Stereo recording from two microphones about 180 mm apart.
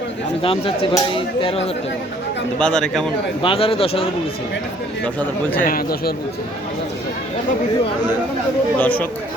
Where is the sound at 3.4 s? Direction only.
30° left (ahead or behind).